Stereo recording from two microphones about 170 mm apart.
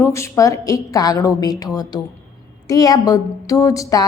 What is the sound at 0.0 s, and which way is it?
A woman's voice, 15° left (ahead or behind).